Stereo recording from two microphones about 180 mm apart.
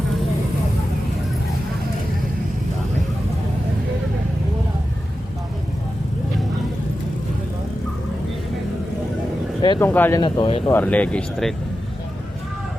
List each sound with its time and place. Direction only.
9.6 s a sound: 25° left (ahead or behind)
9.8 s speech: 10° left (ahead or behind)
10.2 s speech: 25° left (ahead or behind)
10.7 s speech: 10° left (ahead or behind)